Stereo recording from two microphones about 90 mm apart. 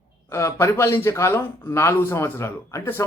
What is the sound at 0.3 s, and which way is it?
A man's voice, 30° left (ahead or behind).